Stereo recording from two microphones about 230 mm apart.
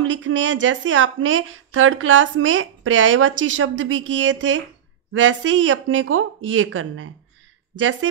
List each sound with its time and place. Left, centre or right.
0.0 s a woman's voice: right